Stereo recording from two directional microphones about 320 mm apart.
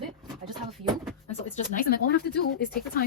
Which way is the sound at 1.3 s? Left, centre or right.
Left.